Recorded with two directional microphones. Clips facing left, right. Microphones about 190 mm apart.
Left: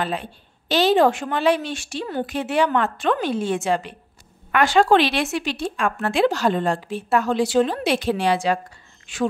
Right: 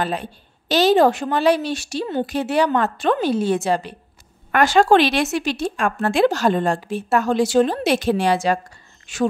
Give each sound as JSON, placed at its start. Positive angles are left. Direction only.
{"t": 0.0, "sound": "a woman's voice", "side_deg": -40}